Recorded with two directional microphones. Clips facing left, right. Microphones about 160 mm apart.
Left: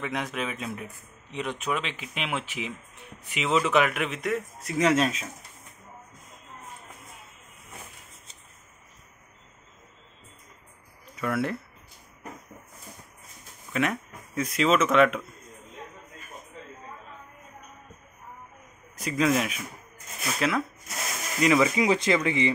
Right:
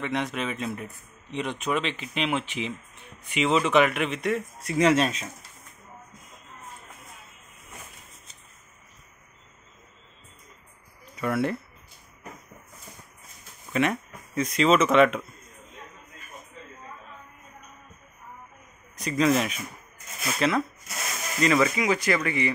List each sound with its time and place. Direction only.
0.0 s speech: 5° left (ahead or behind)
11.1 s speech: centre (ahead or behind)
13.7 s speech: centre (ahead or behind)
18.9 s speech: 5° left (ahead or behind)
21.7 s speech: 25° left (ahead or behind)